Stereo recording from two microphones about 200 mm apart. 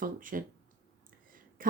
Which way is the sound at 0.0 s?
45° right (ahead or behind).